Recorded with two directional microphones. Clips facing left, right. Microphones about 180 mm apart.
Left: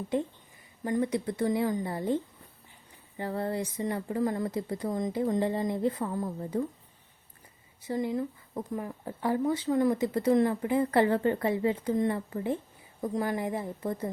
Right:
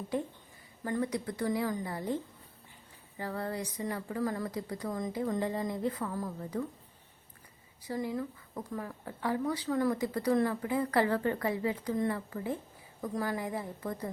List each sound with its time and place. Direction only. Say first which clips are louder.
0.1 s speech: left 4 dB; 25° left (ahead or behind)
3.2 s speech: left 4 dB; 25° left (ahead or behind)
7.9 s speech: left 4 dB; 25° left (ahead or behind)